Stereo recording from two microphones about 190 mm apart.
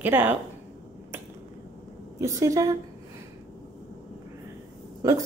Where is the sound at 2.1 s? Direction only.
15° right (ahead or behind).